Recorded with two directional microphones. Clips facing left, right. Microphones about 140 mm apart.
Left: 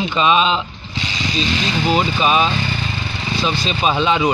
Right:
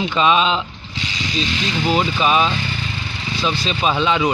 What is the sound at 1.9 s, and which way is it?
Speech, 10° left (ahead or behind).